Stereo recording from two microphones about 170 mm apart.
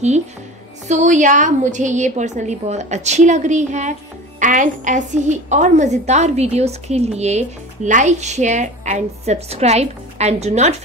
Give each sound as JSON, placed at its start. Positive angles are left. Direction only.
{"t": 0.8, "sound": "a woman's voice", "side_deg": -45}